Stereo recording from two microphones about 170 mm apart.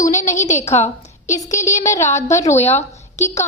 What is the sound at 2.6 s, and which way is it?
Speech, 40° left (ahead or behind).